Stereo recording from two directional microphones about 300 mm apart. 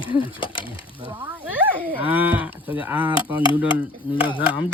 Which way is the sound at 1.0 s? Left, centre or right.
Centre.